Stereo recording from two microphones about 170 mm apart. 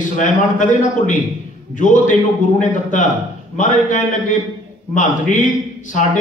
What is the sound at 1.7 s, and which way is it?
A man's voice, 50° left (ahead or behind).